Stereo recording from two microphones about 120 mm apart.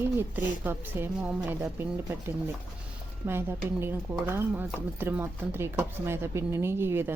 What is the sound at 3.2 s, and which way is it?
Speech, 15° right (ahead or behind).